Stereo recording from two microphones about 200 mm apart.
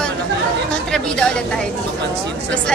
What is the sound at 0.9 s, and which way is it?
Speech, 5° left (ahead or behind).